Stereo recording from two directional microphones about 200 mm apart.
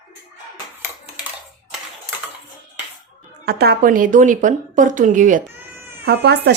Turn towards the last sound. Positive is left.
turn(degrees=-55)  # may be behind; listen again after turning